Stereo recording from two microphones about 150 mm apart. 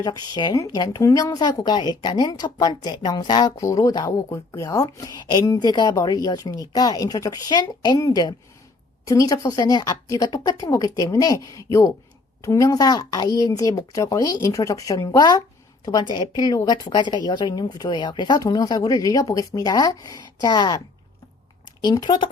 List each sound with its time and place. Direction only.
0.0 s a woman's voice: 30° left (ahead or behind)